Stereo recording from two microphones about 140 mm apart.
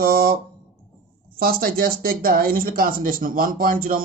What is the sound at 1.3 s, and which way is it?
Speech, 90° right.